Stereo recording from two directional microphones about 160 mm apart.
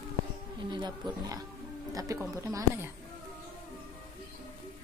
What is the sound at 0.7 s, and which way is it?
Wild animals, 30° right (ahead or behind).